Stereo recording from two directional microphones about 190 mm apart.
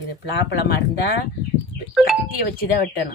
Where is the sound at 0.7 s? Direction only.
55° left (ahead or behind).